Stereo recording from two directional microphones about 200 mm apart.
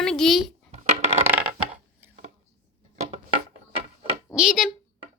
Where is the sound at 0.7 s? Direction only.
35° right (ahead or behind).